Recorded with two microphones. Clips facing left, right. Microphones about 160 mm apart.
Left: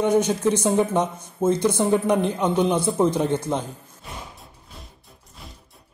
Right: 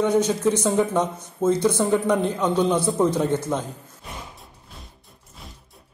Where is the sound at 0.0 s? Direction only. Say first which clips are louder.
Even; 10° left (ahead or behind).